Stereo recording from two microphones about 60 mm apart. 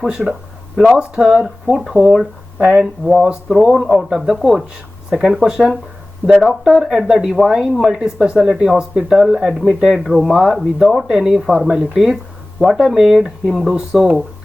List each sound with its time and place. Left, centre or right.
0.0 s speech: centre
7.9 s speech: centre